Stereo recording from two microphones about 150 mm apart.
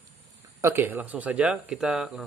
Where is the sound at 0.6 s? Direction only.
15° right (ahead or behind).